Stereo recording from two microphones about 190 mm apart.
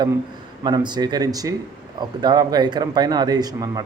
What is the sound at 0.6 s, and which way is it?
Speech, 25° right (ahead or behind).